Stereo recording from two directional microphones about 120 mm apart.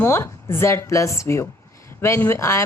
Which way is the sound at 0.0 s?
20° left (ahead or behind).